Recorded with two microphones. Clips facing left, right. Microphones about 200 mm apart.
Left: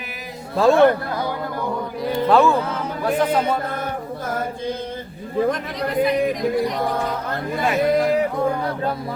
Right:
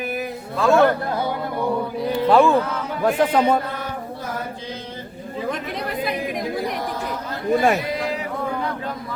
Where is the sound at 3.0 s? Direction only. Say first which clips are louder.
Right 1 dB; 50° right (ahead or behind).